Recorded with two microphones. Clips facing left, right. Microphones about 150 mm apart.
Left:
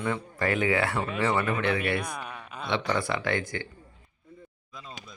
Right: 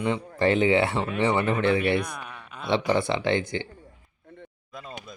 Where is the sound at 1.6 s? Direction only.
30° right (ahead or behind).